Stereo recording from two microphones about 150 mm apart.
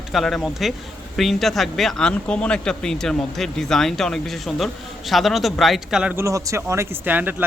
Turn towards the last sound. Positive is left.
turn(degrees=-10)  # may be behind; listen again after turning